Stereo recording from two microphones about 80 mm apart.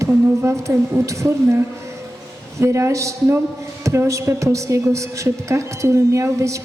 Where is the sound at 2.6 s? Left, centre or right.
Right.